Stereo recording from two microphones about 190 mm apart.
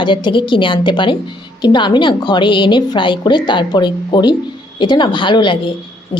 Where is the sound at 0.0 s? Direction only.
25° left (ahead or behind).